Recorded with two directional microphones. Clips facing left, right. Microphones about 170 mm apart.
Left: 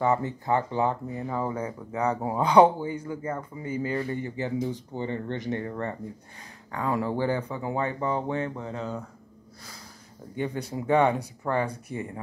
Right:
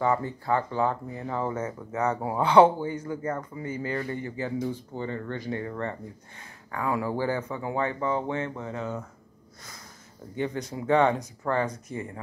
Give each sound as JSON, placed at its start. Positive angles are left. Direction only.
{"t": 0.0, "sound": "speech", "side_deg": 20}
{"t": 3.9, "sound": "speech", "side_deg": 20}
{"t": 10.3, "sound": "speech", "side_deg": 15}